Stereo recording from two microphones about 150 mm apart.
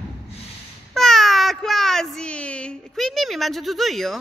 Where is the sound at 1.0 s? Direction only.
Centre (ahead or behind).